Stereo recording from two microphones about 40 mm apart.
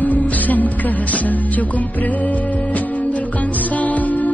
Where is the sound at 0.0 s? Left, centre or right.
Left.